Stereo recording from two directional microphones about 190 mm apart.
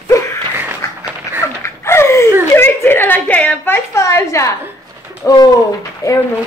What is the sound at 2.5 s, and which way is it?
A woman's voice, 10° left (ahead or behind).